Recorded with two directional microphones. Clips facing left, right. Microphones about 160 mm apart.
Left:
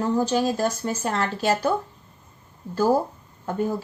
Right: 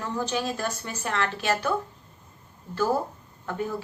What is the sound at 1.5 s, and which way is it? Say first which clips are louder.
Speech: left 3 dB; 25° left (ahead or behind).